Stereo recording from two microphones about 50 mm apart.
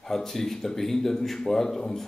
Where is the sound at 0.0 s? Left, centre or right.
Centre.